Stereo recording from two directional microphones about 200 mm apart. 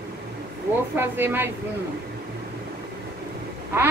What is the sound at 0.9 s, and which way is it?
Speech, 10° right (ahead or behind).